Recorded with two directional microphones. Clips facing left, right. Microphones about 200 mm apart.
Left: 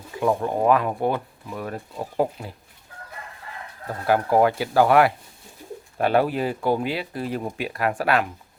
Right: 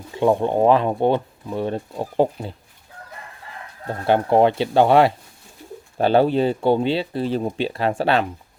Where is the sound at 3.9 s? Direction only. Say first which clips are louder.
Right 3 dB; 25° right (ahead or behind).